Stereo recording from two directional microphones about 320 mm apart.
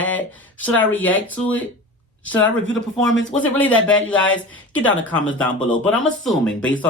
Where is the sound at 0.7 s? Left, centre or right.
Left.